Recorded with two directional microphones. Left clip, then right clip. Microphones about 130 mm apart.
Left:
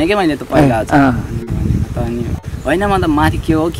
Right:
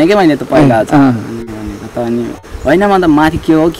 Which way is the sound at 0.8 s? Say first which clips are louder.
Right 2 dB; 25° left (ahead or behind).